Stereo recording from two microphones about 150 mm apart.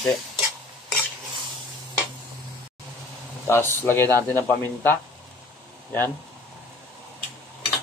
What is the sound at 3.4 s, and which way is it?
Speech, 15° left (ahead or behind).